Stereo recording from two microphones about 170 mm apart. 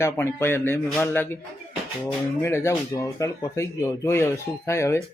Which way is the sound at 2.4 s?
15° left (ahead or behind).